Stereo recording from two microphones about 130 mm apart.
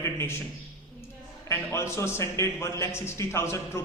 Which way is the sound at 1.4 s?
20° left (ahead or behind).